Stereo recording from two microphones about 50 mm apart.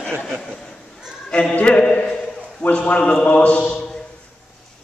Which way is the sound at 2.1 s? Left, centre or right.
Left.